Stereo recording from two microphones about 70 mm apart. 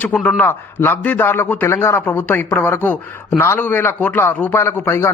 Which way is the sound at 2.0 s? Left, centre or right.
Left.